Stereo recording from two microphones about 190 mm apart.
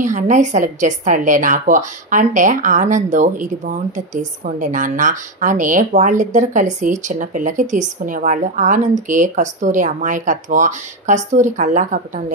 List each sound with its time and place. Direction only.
0.0 s a woman's voice: 40° right (ahead or behind)